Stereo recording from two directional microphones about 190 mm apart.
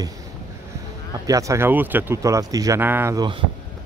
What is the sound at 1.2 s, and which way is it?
Speech, 15° right (ahead or behind).